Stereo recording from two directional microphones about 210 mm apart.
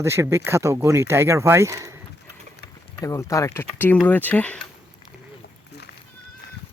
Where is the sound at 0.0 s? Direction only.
10° right (ahead or behind).